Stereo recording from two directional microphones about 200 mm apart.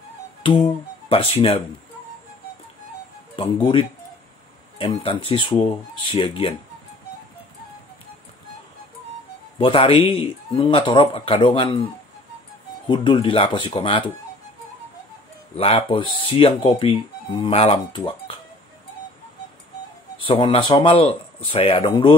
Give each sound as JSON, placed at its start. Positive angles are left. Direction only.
{"t": 0.4, "sound": "speech", "side_deg": 25}
{"t": 3.3, "sound": "speech", "side_deg": 25}
{"t": 9.6, "sound": "speech", "side_deg": 25}
{"t": 12.8, "sound": "speech", "side_deg": 25}
{"t": 15.5, "sound": "speech", "side_deg": 30}
{"t": 20.2, "sound": "speech", "side_deg": 25}